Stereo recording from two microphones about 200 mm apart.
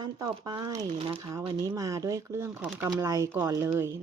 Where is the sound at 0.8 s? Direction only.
30° right (ahead or behind).